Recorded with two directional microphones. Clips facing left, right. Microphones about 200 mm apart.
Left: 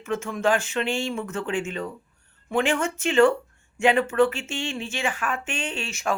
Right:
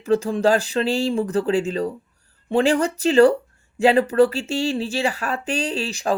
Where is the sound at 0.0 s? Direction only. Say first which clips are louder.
Right 7 dB; 35° right (ahead or behind).